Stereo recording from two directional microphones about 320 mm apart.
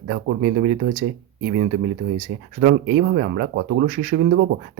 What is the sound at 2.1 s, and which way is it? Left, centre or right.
Speech, right.